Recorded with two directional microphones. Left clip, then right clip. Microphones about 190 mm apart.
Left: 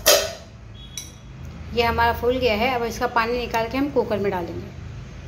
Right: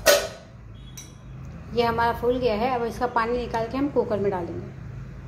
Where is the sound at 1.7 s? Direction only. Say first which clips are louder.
Left 3 dB; 10° right (ahead or behind).